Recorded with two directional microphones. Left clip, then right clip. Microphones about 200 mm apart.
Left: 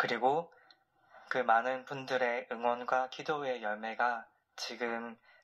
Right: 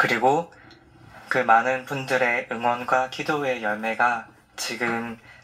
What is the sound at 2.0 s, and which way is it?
Speech, 45° left (ahead or behind).